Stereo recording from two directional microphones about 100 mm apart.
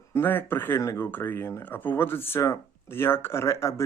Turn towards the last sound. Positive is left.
turn(degrees=30)  # may be behind; listen again after turning